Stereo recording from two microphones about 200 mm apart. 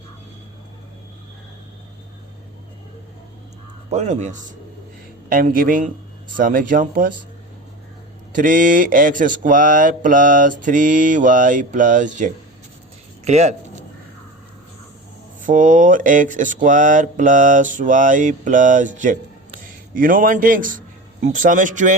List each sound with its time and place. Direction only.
3.8 s speech: 35° right (ahead or behind)
8.3 s speech: 40° right (ahead or behind)
15.4 s a man's voice: 40° right (ahead or behind)